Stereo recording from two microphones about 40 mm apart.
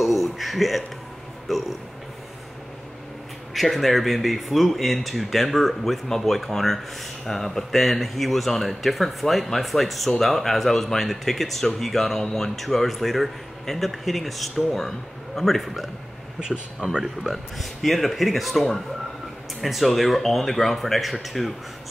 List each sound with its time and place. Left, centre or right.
0.0 s speech: centre
3.5 s speech: centre
16.4 s speech: centre
17.2 s speech: centre